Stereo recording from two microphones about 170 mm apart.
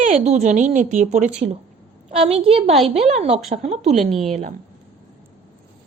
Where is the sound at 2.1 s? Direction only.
35° right (ahead or behind).